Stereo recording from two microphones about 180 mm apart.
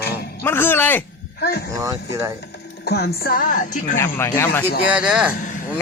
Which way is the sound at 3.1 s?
55° left (ahead or behind).